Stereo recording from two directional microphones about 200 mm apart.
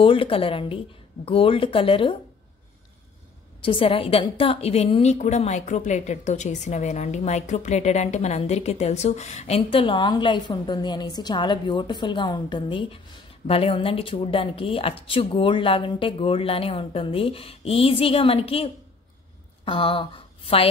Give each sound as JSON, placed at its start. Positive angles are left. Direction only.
{"t": 0.0, "sound": "a woman's voice", "side_deg": 25}
{"t": 3.6, "sound": "a woman's voice", "side_deg": 25}